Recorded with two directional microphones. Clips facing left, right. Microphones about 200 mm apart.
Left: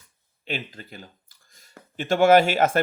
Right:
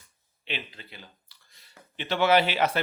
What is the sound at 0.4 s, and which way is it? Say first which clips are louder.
Speech: left 5 dB; 45° left (ahead or behind).